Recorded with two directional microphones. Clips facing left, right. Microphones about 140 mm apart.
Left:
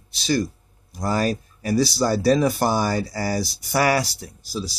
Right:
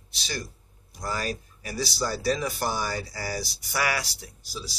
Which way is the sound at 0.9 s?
40° left (ahead or behind).